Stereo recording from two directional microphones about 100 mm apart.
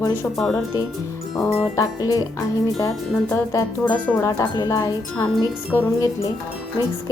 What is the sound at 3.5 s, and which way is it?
Speech, 30° left (ahead or behind).